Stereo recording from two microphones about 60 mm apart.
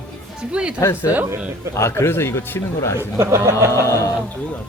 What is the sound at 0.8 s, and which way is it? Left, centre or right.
Speech, left.